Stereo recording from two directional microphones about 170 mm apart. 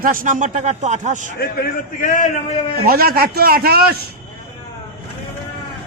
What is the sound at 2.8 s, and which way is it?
A man's voice, 60° right (ahead or behind).